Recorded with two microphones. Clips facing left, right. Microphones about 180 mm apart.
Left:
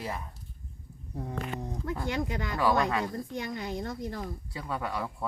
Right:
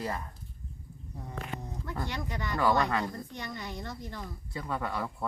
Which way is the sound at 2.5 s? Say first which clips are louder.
Even; 5° left (ahead or behind).